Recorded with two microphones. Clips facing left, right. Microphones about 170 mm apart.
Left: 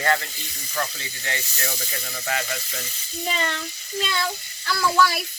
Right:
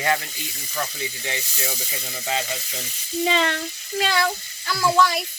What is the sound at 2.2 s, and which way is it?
Frying, 20° right (ahead or behind).